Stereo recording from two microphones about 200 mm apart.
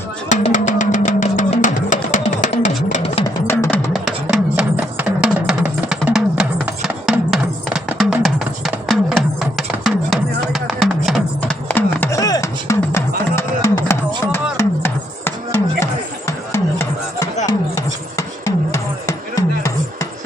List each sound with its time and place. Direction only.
0.3 s music: 40° left (ahead or behind)
3.2 s music: 15° left (ahead or behind)
3.9 s music: centre (ahead or behind); by 20.1 s 15° left (ahead or behind)